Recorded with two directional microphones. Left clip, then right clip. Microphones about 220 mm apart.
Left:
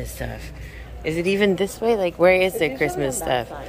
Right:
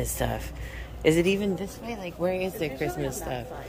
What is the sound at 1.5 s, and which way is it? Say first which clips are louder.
Speech: left 13 dB; 15° left (ahead or behind).